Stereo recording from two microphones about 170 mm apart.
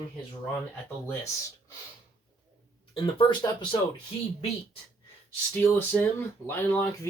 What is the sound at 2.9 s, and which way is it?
Speech, 30° left (ahead or behind).